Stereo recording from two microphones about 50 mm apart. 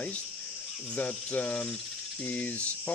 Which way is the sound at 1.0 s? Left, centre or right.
Left.